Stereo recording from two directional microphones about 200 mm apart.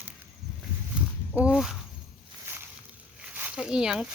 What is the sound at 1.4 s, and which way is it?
Speech, 5° right (ahead or behind).